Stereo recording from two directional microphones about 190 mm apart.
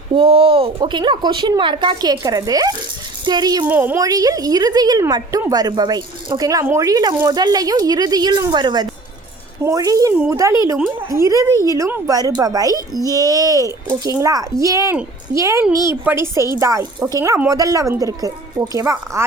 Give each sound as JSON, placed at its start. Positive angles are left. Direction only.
{"t": 0.1, "sound": "a woman's voice", "side_deg": -30}
{"t": 3.7, "sound": "a woman's voice", "side_deg": -10}